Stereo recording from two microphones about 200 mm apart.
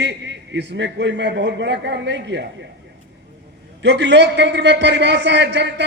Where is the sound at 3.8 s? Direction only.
60° right (ahead or behind).